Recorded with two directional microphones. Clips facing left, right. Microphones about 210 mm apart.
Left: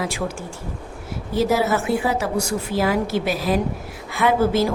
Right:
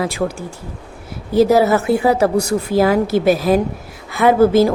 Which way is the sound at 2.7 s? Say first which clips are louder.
Right 6 dB; 40° right (ahead or behind).